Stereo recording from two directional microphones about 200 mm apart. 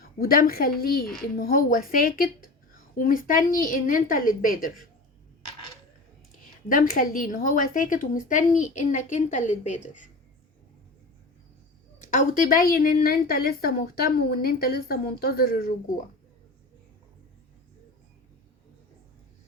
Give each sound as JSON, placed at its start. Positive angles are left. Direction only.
{"t": 0.0, "sound": "a woman's voice", "side_deg": 45}
{"t": 6.7, "sound": "speech", "side_deg": 45}
{"t": 11.9, "sound": "a woman's voice", "side_deg": 40}